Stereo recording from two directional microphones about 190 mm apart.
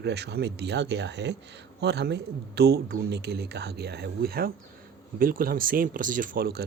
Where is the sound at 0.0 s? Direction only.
60° right (ahead or behind).